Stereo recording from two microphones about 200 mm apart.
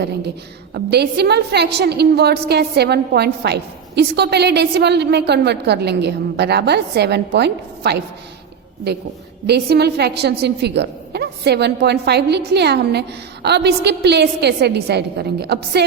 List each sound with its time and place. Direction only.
0.7 s a woman's voice: 55° right (ahead or behind)
9.5 s a woman's voice: 55° right (ahead or behind)